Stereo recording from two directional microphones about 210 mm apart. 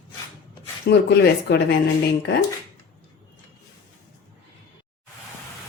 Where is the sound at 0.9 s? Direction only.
50° left (ahead or behind).